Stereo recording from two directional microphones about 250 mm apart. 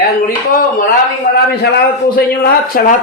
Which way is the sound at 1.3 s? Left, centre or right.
Left.